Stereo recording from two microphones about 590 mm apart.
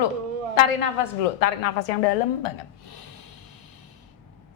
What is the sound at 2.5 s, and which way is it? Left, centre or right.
Speech, left.